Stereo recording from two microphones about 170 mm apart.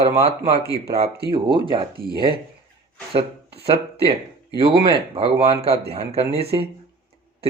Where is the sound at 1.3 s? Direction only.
30° right (ahead or behind).